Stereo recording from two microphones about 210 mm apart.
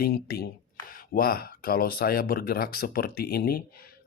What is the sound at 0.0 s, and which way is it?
Speech, 45° left (ahead or behind).